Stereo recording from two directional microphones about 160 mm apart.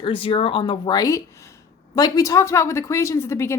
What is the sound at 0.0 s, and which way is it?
Speech, 35° left (ahead or behind).